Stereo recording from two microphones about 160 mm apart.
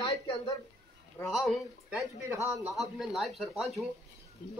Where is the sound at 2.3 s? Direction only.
20° right (ahead or behind).